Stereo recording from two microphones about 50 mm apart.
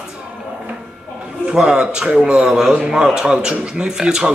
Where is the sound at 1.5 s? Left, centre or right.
Centre.